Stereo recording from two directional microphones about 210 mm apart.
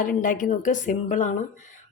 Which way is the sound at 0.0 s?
40° left (ahead or behind).